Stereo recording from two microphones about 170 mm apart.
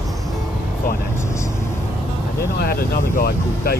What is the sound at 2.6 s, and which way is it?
Speech, 60° left (ahead or behind).